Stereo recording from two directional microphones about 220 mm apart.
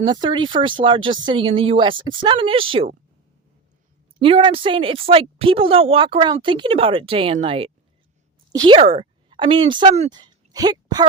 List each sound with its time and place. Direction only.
0.0 s speech: 20° right (ahead or behind)
4.2 s a woman's voice: 25° right (ahead or behind)